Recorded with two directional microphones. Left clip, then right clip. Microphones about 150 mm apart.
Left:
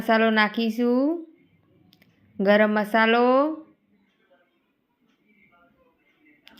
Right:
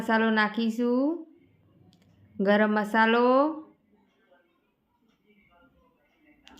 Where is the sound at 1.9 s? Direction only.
15° left (ahead or behind).